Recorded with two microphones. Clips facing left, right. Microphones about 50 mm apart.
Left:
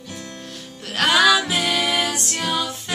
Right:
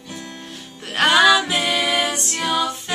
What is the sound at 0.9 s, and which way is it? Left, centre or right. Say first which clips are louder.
Music: right 2 dB; centre.